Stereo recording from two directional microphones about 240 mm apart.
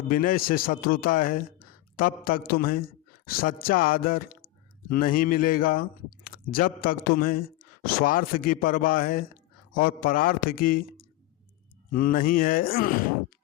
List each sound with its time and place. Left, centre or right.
0.1 s speech: left